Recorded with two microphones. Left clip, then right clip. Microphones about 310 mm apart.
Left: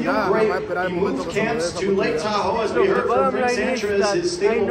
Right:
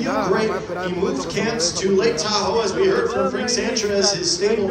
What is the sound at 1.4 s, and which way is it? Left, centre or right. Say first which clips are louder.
A man's voice: right 1 dB; left.